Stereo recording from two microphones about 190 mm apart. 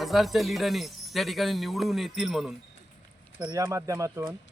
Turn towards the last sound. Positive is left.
turn(degrees=-15)  # may be behind; listen again after turning